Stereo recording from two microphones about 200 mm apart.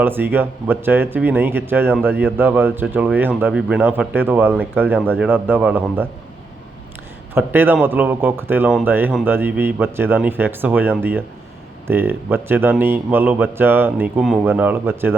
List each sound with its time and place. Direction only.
0.0 s speech: 10° right (ahead or behind)
7.3 s speech: 10° right (ahead or behind)